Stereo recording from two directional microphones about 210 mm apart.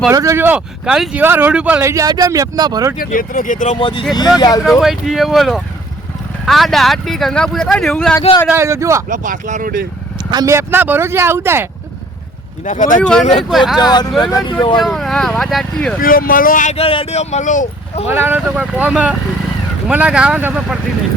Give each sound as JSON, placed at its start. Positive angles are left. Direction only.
{"t": 0.1, "sound": "speech", "side_deg": -15}
{"t": 3.0, "sound": "speech", "side_deg": 40}
{"t": 3.8, "sound": "speech", "side_deg": 25}
{"t": 4.8, "sound": "speech", "side_deg": 0}
{"t": 8.4, "sound": "speech", "side_deg": -10}
{"t": 9.0, "sound": "speech", "side_deg": -40}
{"t": 10.3, "sound": "speech", "side_deg": -15}
{"t": 12.6, "sound": "speech", "side_deg": 40}
{"t": 13.0, "sound": "speech", "side_deg": 5}
{"t": 14.2, "sound": "speech", "side_deg": 20}
{"t": 14.8, "sound": "speech", "side_deg": 0}
{"t": 16.0, "sound": "speech", "side_deg": 45}
{"t": 18.1, "sound": "speech", "side_deg": -10}